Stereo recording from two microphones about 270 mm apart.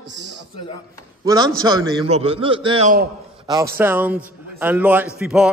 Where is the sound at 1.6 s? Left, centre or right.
Centre.